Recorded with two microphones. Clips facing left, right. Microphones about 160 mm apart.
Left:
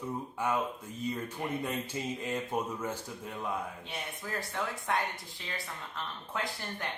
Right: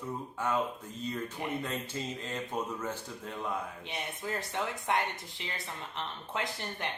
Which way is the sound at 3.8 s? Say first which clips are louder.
Right 3 dB; 20° right (ahead or behind).